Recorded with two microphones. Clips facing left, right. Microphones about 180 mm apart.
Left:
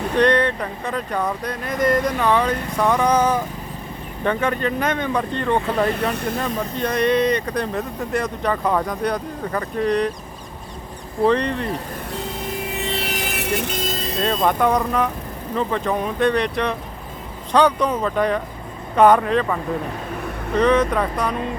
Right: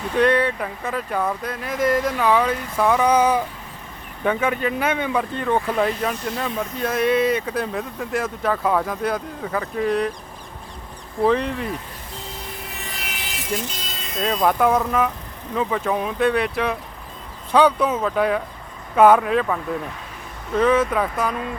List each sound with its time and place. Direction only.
0.2 s speech: 5° right (ahead or behind)
5.9 s speech: 65° left (ahead or behind)
6.7 s speech: 5° right (ahead or behind)
11.3 s speech: 5° right (ahead or behind)
12.9 s vehicle: 30° left (ahead or behind)
13.1 s vehicle: 55° left (ahead or behind); by 14.2 s 40° left (ahead or behind)
14.4 s speech: 5° right (ahead or behind)